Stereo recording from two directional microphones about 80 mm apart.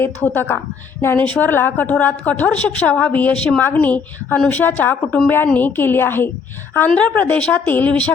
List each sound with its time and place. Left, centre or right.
0.0 s a woman's voice: left